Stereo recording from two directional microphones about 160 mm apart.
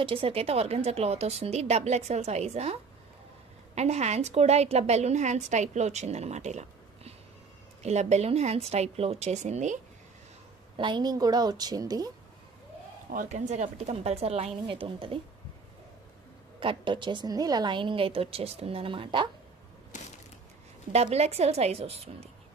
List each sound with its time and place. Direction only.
0.0 s a woman's voice: 35° right (ahead or behind)
10.8 s a woman's voice: 30° right (ahead or behind)
13.1 s a woman's voice: 50° right (ahead or behind); by 15.1 s 35° right (ahead or behind)
16.5 s a woman's voice: 30° right (ahead or behind)
19.9 s crushing: 50° left (ahead or behind)
20.9 s a woman's voice: 40° right (ahead or behind)